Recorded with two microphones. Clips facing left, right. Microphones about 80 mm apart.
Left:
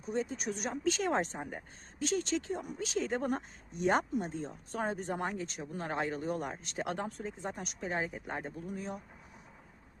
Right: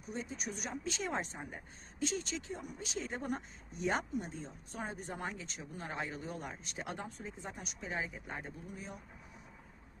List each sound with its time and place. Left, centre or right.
0.1 s speech: left
5.2 s speech: left
6.8 s speech: left